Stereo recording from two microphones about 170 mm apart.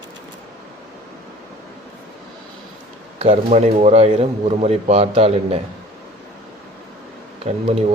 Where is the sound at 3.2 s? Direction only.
40° right (ahead or behind).